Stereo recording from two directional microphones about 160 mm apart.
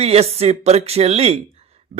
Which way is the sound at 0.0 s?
40° right (ahead or behind).